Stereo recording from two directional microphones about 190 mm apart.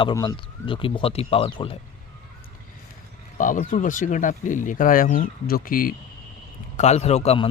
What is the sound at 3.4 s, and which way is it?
Speech, 45° left (ahead or behind).